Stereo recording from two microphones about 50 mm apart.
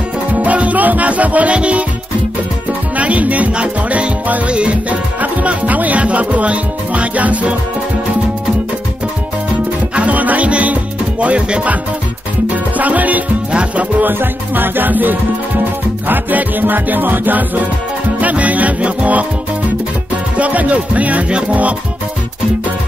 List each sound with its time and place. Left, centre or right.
0.3 s music: right
3.0 s music: right
9.9 s music: right
14.1 s music: right
20.3 s music: right